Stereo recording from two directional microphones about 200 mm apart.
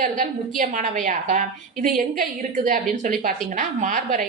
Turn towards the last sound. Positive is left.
turn(degrees=-40)  # may be behind; listen again after turning